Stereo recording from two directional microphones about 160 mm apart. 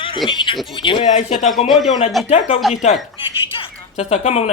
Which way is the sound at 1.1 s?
50° left (ahead or behind).